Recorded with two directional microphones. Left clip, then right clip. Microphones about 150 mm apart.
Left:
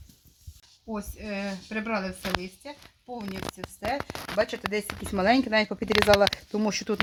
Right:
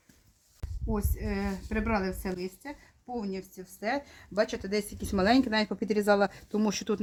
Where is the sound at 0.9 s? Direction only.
45° left (ahead or behind).